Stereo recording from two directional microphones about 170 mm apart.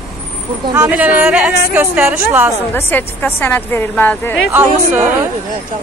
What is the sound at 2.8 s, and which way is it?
A woman's voice, 10° left (ahead or behind).